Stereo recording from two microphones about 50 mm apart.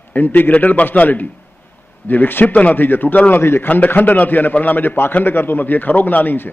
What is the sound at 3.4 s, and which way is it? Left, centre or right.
Speech, left.